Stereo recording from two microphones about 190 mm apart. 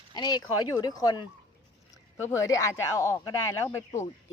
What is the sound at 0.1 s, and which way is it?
Speech, 20° left (ahead or behind).